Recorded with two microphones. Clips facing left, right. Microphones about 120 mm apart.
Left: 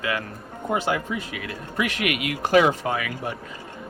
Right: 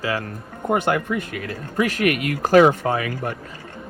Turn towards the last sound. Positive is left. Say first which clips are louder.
# right 5 dB
turn(degrees=-40)  # may be behind; listen again after turning